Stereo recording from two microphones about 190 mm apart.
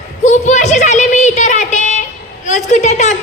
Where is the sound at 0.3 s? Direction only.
40° left (ahead or behind).